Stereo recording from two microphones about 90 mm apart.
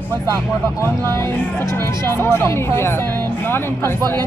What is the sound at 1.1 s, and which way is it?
Music, 30° left (ahead or behind).